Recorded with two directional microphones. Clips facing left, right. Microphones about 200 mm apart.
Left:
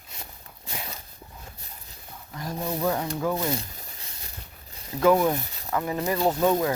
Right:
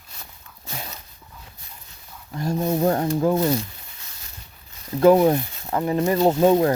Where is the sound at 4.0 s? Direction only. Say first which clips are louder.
Left 2 dB; 30° left (ahead or behind).